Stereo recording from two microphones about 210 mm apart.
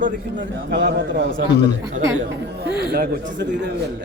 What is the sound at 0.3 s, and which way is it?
A man's voice, 55° right (ahead or behind).